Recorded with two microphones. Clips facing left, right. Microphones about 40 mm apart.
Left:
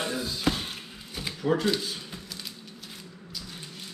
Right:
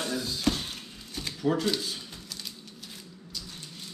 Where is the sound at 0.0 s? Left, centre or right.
Left.